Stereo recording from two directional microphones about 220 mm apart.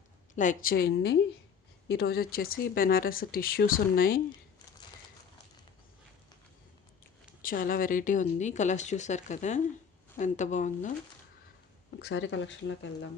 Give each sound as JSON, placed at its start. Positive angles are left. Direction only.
{"t": 0.3, "sound": "a woman's voice", "side_deg": 40}
{"t": 7.4, "sound": "speech", "side_deg": 40}
{"t": 11.9, "sound": "speech", "side_deg": 55}